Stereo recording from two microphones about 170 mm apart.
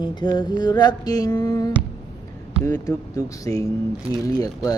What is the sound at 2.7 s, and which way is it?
Mantra, 20° left (ahead or behind).